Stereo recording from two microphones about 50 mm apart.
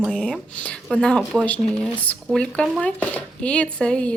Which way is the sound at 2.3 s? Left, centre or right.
Centre.